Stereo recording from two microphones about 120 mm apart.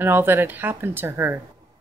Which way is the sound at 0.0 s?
15° right (ahead or behind).